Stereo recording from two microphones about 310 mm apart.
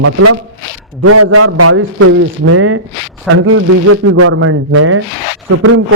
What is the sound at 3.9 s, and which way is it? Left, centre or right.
Speech, right.